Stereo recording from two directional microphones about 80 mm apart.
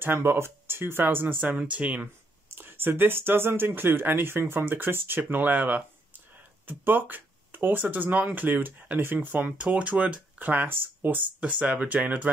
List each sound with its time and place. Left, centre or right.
0.0 s speech: right
2.5 s speech: right